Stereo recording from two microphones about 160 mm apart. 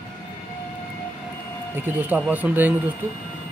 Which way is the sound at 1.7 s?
10° right (ahead or behind).